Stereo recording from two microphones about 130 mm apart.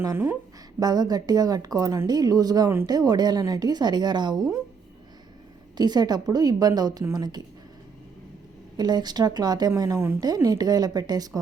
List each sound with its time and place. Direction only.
0.0 s a woman's voice: 20° right (ahead or behind)
0.8 s a woman's voice: 30° right (ahead or behind)
5.7 s a woman's voice: 30° right (ahead or behind)
8.8 s a woman's voice: 30° right (ahead or behind)